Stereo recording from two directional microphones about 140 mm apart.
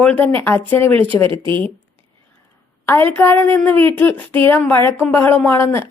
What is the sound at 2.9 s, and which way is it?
A woman's voice, 15° left (ahead or behind).